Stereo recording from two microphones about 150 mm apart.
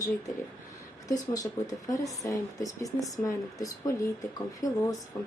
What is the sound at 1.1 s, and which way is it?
Speech, 25° left (ahead or behind).